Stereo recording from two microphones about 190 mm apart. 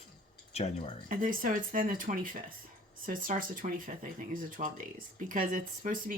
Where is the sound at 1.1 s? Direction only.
45° right (ahead or behind).